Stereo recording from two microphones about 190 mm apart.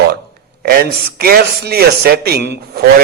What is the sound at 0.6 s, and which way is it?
Speech, 55° right (ahead or behind).